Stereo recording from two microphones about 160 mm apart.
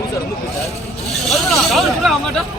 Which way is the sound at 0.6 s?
Centre (ahead or behind).